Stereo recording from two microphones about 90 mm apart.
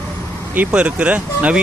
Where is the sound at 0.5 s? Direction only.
15° right (ahead or behind).